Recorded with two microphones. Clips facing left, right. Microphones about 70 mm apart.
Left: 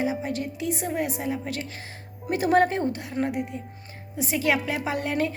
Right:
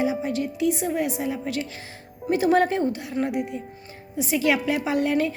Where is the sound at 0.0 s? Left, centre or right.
Left.